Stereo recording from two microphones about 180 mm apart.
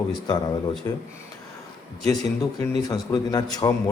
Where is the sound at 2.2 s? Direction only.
20° left (ahead or behind).